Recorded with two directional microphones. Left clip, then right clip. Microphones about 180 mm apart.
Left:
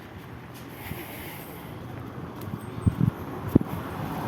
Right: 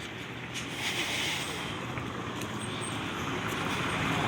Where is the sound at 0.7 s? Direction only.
20° left (ahead or behind).